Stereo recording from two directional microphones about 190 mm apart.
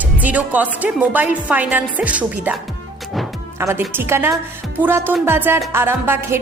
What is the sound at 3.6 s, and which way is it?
Speech, 10° right (ahead or behind).